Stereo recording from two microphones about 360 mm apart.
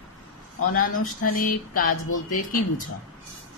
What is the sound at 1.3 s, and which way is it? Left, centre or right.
Speech, left.